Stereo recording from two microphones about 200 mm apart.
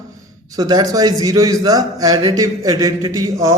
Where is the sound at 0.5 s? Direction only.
20° right (ahead or behind).